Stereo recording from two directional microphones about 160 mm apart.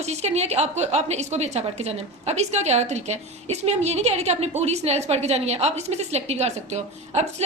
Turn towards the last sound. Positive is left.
turn(degrees=-45)  # may be behind; listen again after turning